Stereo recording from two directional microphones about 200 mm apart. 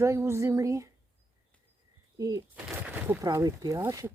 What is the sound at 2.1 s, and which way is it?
Speech, 20° right (ahead or behind).